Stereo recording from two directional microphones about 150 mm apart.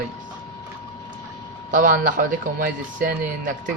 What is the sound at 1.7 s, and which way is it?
Speech, 65° right (ahead or behind).